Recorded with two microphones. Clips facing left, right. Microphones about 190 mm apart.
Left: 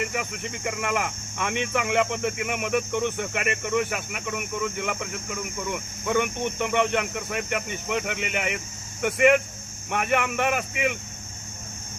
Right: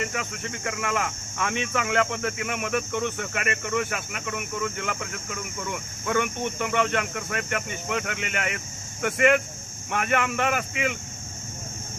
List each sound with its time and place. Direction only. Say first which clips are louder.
0.0 s speech: left 1 dB; 10° left (ahead or behind)